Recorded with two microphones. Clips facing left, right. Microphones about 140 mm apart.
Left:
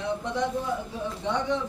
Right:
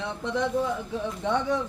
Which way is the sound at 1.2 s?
60° right (ahead or behind).